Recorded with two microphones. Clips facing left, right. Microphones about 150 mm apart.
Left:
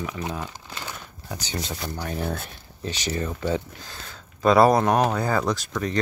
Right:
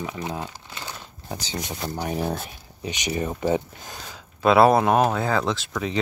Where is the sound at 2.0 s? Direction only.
15° right (ahead or behind).